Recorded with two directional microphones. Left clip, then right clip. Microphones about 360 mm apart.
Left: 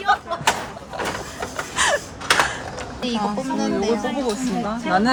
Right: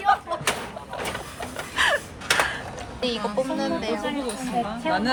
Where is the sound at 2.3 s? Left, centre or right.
Left.